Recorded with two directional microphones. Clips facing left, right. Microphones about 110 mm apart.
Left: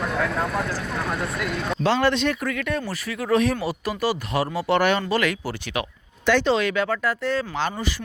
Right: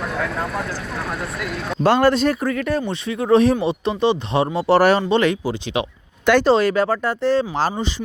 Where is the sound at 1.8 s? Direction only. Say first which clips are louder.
Right 6 dB; 45° right (ahead or behind); by 5.8 s 20° right (ahead or behind).